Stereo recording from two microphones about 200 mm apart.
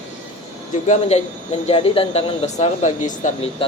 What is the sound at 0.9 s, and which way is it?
Speech, 35° left (ahead or behind).